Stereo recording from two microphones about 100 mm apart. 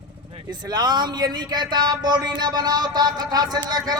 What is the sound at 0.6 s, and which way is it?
Speech, 45° right (ahead or behind).